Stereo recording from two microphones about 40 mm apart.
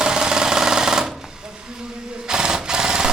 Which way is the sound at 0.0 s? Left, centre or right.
Centre.